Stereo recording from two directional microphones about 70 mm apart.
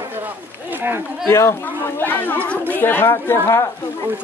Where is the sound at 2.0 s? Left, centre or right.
Left.